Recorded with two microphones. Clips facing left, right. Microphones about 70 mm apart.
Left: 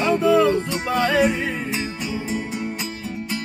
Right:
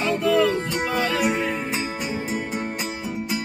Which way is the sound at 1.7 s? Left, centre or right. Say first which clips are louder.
Even; right.